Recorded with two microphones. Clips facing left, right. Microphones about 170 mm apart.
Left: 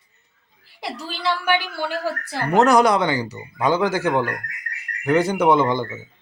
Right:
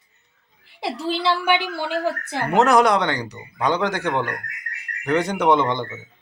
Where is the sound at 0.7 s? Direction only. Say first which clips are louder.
Right 6 dB; 25° right (ahead or behind).